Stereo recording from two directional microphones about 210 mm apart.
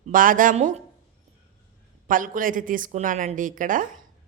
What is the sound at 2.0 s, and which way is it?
A woman's voice, 40° right (ahead or behind).